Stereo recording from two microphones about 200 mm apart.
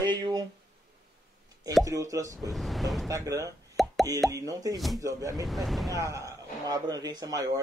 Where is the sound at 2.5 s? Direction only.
Centre (ahead or behind).